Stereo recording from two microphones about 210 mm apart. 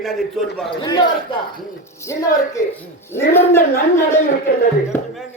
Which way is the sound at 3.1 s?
10° left (ahead or behind).